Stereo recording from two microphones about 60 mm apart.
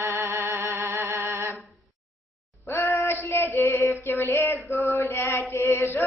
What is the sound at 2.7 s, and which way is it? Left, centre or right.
Female singing, left.